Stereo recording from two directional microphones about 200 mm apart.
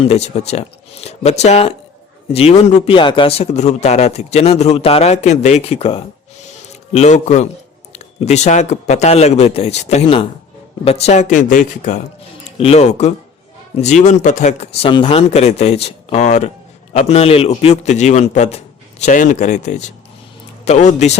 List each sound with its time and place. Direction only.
0.0 s a man's voice: 30° left (ahead or behind)